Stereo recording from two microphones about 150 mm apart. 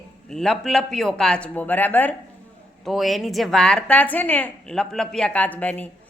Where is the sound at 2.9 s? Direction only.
Centre (ahead or behind).